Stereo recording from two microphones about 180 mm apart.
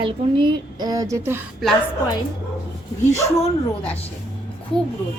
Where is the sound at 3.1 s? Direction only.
35° left (ahead or behind).